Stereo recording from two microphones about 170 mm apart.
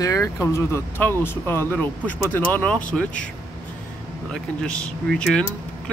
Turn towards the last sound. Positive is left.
turn(degrees=5)  # may be behind; listen again after turning